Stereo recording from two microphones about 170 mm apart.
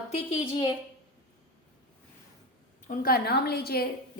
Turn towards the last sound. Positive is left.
turn(degrees=65)  # may be behind; listen again after turning